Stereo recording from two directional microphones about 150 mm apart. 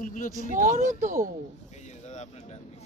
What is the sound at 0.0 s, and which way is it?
Speech, 65° left (ahead or behind).